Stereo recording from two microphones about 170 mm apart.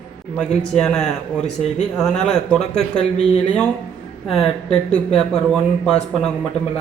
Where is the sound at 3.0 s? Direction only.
40° left (ahead or behind).